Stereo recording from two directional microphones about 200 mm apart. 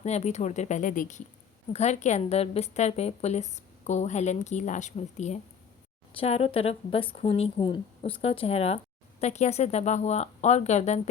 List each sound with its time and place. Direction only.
0.0 s a woman's voice: 35° left (ahead or behind)